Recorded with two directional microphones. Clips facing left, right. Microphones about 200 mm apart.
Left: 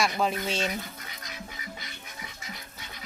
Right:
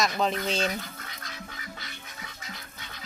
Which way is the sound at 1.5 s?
15° left (ahead or behind).